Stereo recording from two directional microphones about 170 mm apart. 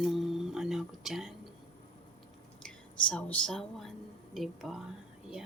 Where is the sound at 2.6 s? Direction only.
5° left (ahead or behind).